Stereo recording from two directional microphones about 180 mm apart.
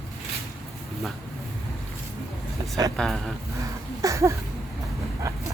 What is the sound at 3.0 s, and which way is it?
Speech, centre (ahead or behind).